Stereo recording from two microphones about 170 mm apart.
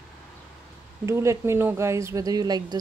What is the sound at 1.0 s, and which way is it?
Speech, 15° right (ahead or behind).